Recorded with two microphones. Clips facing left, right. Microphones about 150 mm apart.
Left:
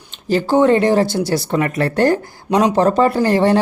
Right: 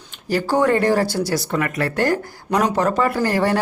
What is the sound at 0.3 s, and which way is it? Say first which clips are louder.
Speech: left 5 dB; 25° left (ahead or behind).